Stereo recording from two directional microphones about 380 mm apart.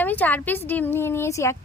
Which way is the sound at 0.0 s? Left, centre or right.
Centre.